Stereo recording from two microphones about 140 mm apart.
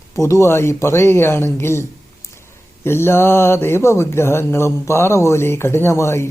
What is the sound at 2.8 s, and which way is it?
Speech, 15° left (ahead or behind).